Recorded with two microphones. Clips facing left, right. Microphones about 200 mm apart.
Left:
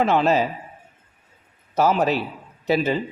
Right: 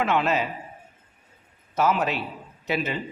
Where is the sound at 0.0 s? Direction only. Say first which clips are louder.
Left 5 dB; 35° left (ahead or behind).